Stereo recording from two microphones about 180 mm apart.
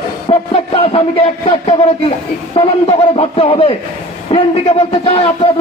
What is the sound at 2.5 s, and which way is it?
Speech, 30° left (ahead or behind).